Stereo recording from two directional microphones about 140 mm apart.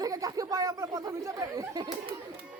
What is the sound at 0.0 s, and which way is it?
Speech, 25° right (ahead or behind).